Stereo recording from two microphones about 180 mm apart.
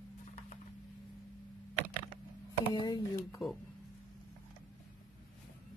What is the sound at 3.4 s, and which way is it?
Speech, centre (ahead or behind).